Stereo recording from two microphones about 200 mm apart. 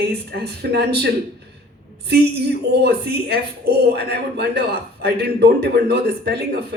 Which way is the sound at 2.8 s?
55° right (ahead or behind).